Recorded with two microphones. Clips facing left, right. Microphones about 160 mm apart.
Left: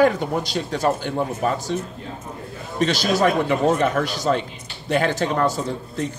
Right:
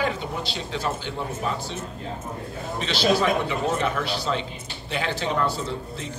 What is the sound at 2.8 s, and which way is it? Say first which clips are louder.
Speech: left 3 dB; 45° left (ahead or behind).